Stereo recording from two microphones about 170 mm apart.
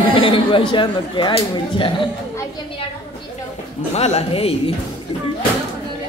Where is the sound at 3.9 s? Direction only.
35° left (ahead or behind).